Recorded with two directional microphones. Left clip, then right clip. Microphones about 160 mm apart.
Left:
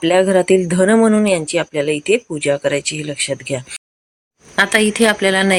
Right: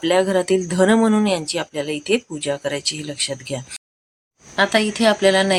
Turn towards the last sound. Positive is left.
turn(degrees=25)  # may be behind; listen again after turning